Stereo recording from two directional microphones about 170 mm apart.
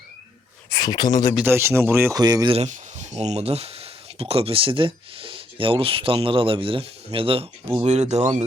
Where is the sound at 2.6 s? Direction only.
45° right (ahead or behind).